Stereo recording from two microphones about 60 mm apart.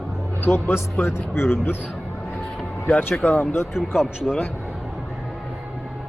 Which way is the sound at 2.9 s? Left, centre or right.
Left.